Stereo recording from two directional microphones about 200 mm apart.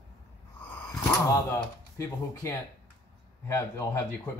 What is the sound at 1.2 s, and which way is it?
Speech, 15° left (ahead or behind).